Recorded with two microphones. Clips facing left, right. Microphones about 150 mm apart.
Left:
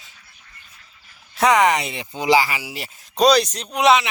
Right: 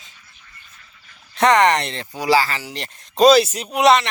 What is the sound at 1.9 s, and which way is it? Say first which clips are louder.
Speech: even; 20° left (ahead or behind).